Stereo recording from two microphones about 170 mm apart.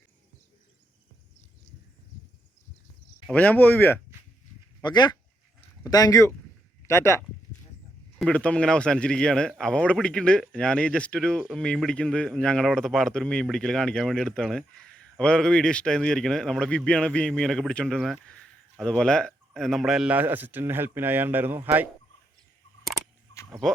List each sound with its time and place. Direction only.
3.3 s speech: 10° left (ahead or behind)
4.8 s speech: 25° left (ahead or behind); by 21.8 s 10° right (ahead or behind)
22.8 s camera: centre (ahead or behind)
23.5 s speech: centre (ahead or behind)